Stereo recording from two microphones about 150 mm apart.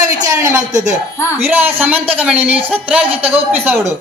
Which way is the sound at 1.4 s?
15° right (ahead or behind).